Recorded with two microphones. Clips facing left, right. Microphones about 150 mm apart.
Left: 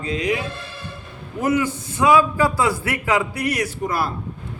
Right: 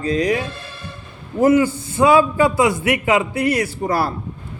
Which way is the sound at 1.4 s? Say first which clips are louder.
Right 6 dB; 30° right (ahead or behind).